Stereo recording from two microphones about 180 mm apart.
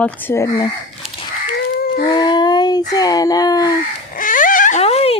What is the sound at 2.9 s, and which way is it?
Speech, 20° left (ahead or behind).